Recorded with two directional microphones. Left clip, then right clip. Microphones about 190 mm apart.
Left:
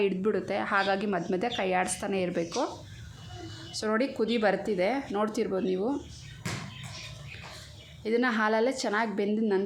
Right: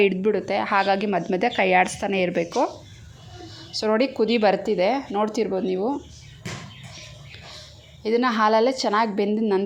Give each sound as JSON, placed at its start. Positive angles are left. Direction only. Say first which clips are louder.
{"t": 0.0, "sound": "speech", "louder": "right 7 dB", "side_deg": -10}
{"t": 3.7, "sound": "speech", "louder": "right 7 dB", "side_deg": -20}
{"t": 8.0, "sound": "speech", "louder": "right 7 dB", "side_deg": -15}